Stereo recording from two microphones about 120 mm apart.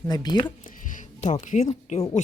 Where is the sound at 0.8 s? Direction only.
90° left.